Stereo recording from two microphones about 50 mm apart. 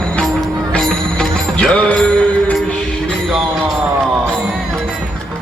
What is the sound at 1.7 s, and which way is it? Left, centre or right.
Music, left.